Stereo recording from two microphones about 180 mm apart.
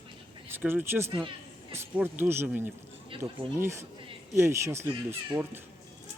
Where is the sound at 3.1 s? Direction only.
30° right (ahead or behind).